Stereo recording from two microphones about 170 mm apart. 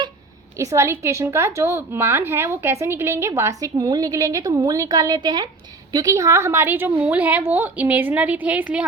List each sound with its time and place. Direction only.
0.5 s a woman's voice: 15° right (ahead or behind)